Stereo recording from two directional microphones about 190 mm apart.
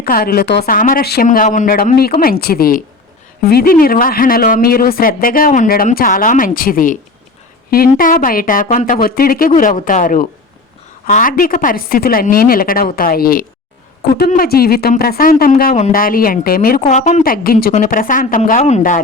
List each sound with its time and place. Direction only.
0.0 s speech: 50° left (ahead or behind)
16.9 s speech: 40° left (ahead or behind)